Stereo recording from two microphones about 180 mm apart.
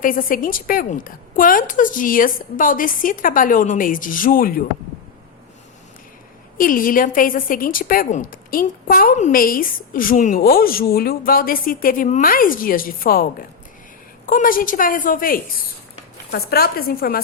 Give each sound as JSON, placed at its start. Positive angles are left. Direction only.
{"t": 0.0, "sound": "a woman's voice", "side_deg": 50}
{"t": 6.6, "sound": "a woman's voice", "side_deg": 50}
{"t": 14.3, "sound": "a woman's voice", "side_deg": 50}